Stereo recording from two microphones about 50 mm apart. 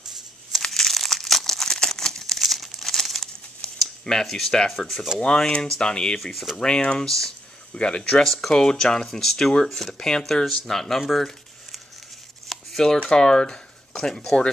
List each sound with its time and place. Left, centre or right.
0.7 s crumpling: centre
4.7 s speech: centre
5.2 s speech: centre
6.1 s speech: centre
6.5 s speech: centre
7.0 s speech: centre
7.7 s speech: centre
12.4 s a sound: centre
13.1 s speech: centre